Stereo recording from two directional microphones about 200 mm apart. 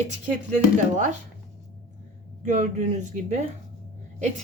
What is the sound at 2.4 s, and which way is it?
Speech, 40° right (ahead or behind).